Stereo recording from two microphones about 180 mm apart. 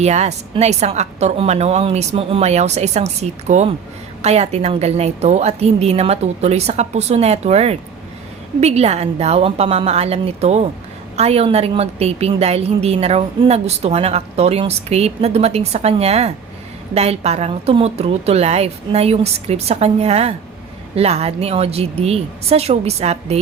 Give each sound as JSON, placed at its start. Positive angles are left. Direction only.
{"t": 0.0, "sound": "a woman's voice", "side_deg": -40}